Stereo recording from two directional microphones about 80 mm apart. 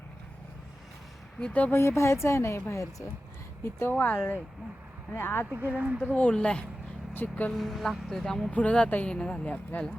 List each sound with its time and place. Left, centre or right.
1.4 s speech: centre
1.7 s a woman's voice: left
3.9 s speech: centre
5.5 s speech: right
6.1 s speech: centre
7.1 s speech: left
7.5 s speech: centre